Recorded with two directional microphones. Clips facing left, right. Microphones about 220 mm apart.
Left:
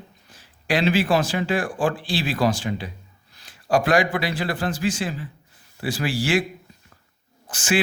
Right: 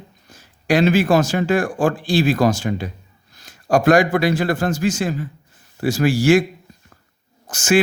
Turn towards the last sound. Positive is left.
turn(degrees=-45)  # may be behind; listen again after turning